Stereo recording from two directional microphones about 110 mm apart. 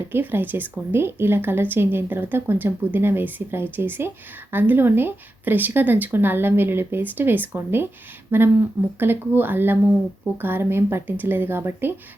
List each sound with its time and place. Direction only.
0.1 s a woman's voice: 20° right (ahead or behind)